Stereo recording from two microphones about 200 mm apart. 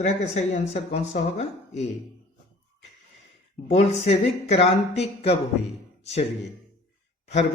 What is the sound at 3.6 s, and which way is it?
Speech, 35° left (ahead or behind).